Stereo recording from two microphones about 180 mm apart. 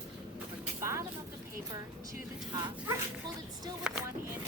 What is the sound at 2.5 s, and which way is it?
Speech, 20° right (ahead or behind).